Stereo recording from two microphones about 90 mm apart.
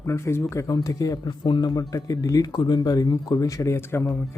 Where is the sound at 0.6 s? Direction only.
45° left (ahead or behind).